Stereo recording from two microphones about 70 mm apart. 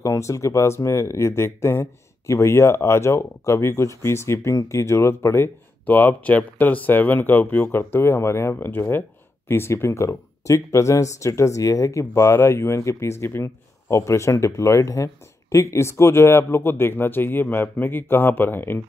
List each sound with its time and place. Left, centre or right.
0.0 s speech: left
5.9 s speech: left